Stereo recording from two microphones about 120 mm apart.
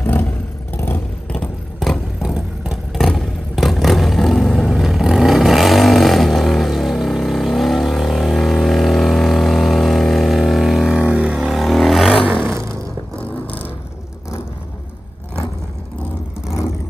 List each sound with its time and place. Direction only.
0.0 s vehicle: 15° left (ahead or behind); by 12.2 s centre (ahead or behind)
12.4 s roar: 25° right (ahead or behind)